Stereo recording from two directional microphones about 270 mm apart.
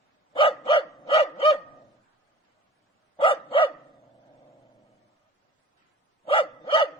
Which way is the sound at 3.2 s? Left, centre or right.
Centre.